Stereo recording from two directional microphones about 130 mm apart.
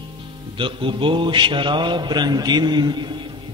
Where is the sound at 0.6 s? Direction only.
40° right (ahead or behind).